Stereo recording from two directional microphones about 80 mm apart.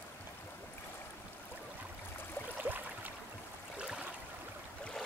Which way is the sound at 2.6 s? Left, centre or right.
Right.